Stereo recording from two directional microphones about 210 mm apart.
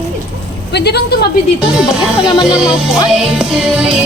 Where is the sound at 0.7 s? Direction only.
50° left (ahead or behind).